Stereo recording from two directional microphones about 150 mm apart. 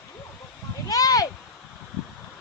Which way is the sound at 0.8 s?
25° left (ahead or behind).